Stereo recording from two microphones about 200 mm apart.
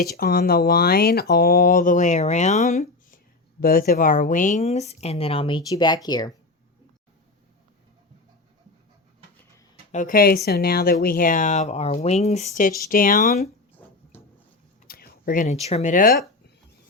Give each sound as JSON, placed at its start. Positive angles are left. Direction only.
{"t": 0.0, "sound": "speech", "side_deg": 50}
{"t": 9.9, "sound": "speech", "side_deg": 40}
{"t": 14.8, "sound": "speech", "side_deg": 50}